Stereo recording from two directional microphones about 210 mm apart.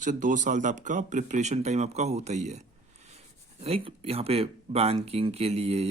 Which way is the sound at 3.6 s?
25° right (ahead or behind).